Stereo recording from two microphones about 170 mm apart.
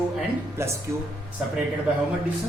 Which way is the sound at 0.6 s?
15° right (ahead or behind).